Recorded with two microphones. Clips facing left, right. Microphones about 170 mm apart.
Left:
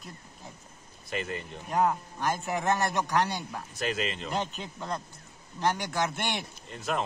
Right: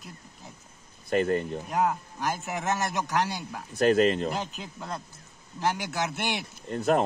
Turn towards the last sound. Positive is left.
turn(degrees=-50)  # may be behind; listen again after turning